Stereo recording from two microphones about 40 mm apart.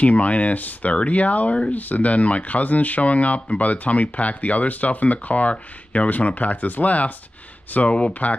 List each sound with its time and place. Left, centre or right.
0.0 s speech: left